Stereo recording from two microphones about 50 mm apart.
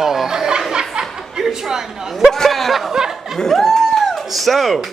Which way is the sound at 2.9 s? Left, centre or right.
Centre.